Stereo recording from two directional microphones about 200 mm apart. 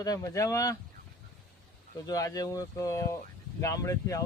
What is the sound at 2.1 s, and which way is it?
Speech, 20° left (ahead or behind).